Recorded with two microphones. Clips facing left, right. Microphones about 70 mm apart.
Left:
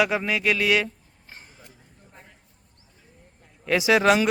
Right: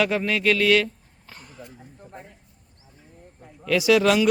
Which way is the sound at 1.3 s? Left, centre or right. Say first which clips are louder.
Right 3 dB; right.